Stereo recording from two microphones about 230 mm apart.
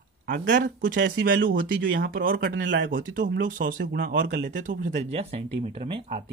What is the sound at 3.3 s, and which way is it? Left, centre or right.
Speech, right.